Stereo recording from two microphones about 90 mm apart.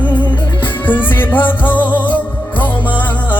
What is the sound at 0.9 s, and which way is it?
Music, 20° left (ahead or behind).